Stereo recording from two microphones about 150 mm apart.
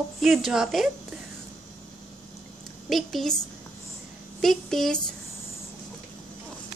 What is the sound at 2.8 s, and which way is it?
Speech, centre (ahead or behind).